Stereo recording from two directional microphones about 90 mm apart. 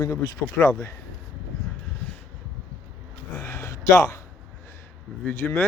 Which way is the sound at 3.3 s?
35° left (ahead or behind).